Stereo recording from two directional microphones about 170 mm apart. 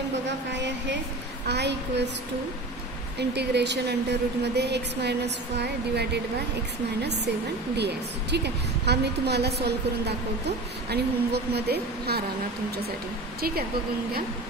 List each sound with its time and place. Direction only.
1.5 s a woman's voice: 80° right
3.2 s a woman's voice: 80° right
7.7 s a woman's voice: 80° right